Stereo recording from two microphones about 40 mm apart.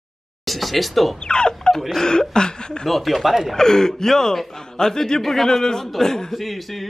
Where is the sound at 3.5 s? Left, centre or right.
Centre.